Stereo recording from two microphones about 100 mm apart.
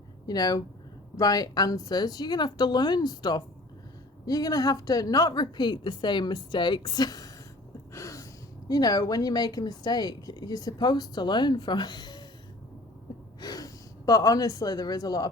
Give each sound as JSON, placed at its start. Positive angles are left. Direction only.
{"t": 0.3, "sound": "a woman's voice", "side_deg": 40}
{"t": 13.4, "sound": "speech", "side_deg": 40}